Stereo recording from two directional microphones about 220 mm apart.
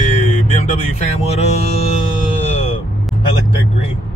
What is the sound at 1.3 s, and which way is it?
Music, 30° left (ahead or behind).